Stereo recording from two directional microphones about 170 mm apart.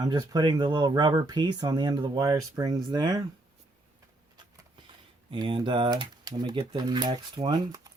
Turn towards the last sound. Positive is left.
turn(degrees=-25)  # may be behind; listen again after turning